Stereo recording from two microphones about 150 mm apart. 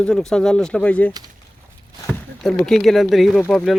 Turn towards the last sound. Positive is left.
turn(degrees=5)  # may be behind; listen again after turning